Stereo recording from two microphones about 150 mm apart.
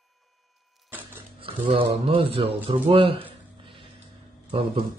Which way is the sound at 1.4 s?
40° right (ahead or behind).